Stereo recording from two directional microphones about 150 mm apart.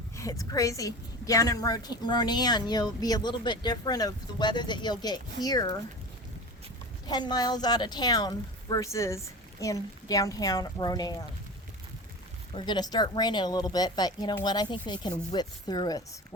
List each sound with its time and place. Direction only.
0.2 s a woman's voice: 20° left (ahead or behind)
7.1 s a woman's voice: 25° left (ahead or behind)
12.5 s a woman's voice: 30° left (ahead or behind)